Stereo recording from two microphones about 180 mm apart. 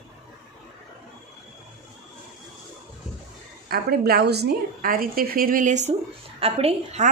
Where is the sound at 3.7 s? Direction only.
60° right (ahead or behind).